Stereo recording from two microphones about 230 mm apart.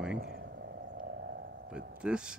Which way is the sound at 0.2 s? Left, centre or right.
Right.